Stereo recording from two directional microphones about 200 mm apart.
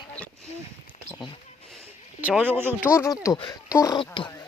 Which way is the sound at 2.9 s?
15° left (ahead or behind).